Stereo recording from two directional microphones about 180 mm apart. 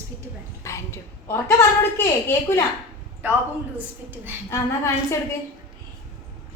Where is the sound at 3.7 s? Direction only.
10° right (ahead or behind).